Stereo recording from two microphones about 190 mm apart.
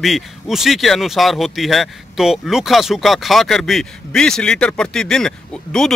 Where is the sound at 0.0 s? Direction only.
Centre (ahead or behind).